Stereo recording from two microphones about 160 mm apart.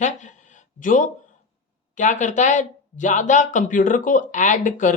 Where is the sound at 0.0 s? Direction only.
50° left (ahead or behind).